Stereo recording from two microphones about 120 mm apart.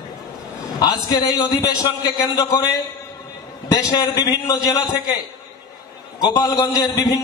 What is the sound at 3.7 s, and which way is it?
A man's voice, 40° left (ahead or behind).